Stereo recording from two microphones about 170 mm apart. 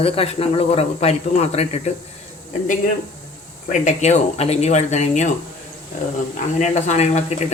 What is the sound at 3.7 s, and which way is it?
Speech, 45° left (ahead or behind).